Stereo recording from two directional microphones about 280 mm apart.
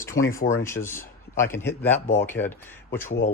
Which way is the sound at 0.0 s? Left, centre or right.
Centre.